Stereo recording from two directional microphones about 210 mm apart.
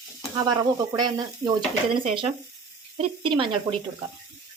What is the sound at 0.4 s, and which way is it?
Speech, 20° right (ahead or behind).